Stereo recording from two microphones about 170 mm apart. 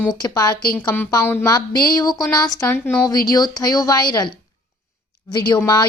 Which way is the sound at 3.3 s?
25° left (ahead or behind).